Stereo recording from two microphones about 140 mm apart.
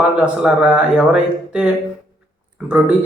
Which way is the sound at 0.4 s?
5° right (ahead or behind).